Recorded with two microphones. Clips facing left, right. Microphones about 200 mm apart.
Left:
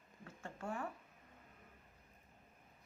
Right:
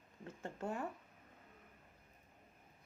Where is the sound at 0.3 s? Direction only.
20° right (ahead or behind).